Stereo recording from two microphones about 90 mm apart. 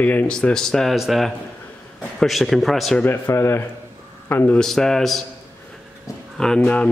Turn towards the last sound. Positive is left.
turn(degrees=10)  # may be behind; listen again after turning